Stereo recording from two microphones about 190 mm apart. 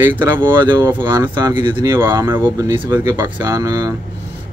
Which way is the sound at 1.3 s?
25° right (ahead or behind).